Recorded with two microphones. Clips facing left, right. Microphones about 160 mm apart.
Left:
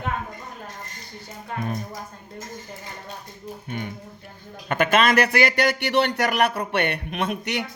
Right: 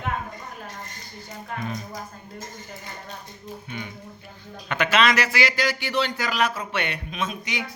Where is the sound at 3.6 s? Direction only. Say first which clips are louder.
Left 7 dB; 50° left (ahead or behind).